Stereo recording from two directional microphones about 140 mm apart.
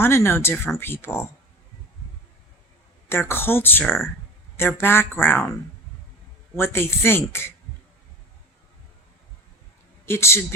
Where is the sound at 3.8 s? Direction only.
Centre (ahead or behind).